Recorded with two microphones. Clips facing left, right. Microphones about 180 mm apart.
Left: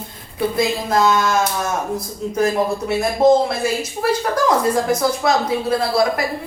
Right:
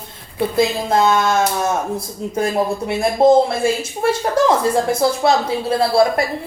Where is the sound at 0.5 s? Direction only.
25° right (ahead or behind).